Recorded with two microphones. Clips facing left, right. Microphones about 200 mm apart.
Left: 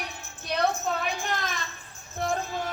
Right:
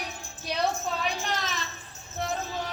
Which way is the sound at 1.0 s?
50° left (ahead or behind).